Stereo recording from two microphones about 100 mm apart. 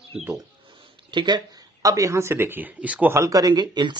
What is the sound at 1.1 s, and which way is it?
A man's voice, 45° right (ahead or behind).